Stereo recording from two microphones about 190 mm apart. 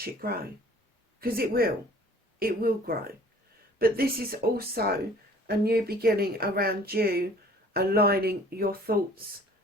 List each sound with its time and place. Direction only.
0.0 s speech: 50° right (ahead or behind)